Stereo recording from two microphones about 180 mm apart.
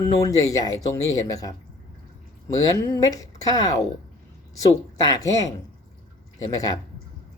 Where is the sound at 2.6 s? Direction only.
20° left (ahead or behind).